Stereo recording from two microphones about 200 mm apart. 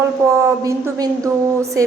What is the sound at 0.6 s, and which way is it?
A woman's voice, 15° right (ahead or behind).